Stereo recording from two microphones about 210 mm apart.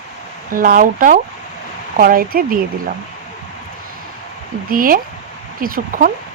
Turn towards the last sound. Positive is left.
turn(degrees=-45)  # may be behind; listen again after turning